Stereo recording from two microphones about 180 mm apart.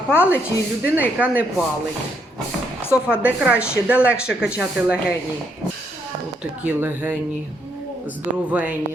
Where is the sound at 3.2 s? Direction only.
5° right (ahead or behind).